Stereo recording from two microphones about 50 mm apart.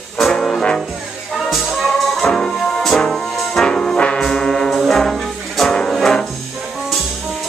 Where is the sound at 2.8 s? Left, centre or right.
Centre.